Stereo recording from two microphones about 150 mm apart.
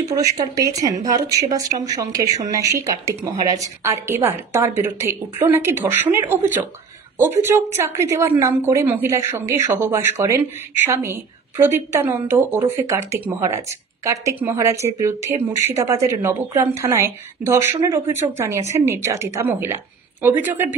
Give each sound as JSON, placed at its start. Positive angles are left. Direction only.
{"t": 0.1, "sound": "a woman's voice", "side_deg": -20}